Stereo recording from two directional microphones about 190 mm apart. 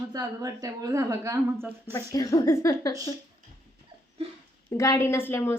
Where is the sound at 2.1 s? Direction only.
20° left (ahead or behind).